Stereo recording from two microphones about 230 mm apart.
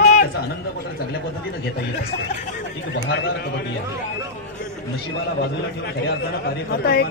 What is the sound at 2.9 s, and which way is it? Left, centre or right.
Speech, left.